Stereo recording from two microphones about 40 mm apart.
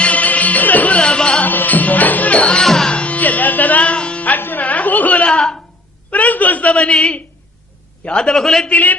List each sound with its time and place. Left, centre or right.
0.0 s music: left
0.9 s music: left
1.5 s music: left
2.6 s a man's voice: centre
2.9 s music: left
3.2 s music: left
4.4 s music: left
4.6 s chatter: left
6.1 s a sound: left
6.7 s a man's voice: centre
8.1 s a man's voice: centre